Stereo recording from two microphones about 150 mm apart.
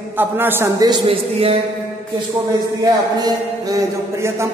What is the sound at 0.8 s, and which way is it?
Speech, 35° right (ahead or behind).